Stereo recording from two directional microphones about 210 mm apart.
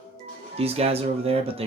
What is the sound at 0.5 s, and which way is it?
Speech, 30° right (ahead or behind).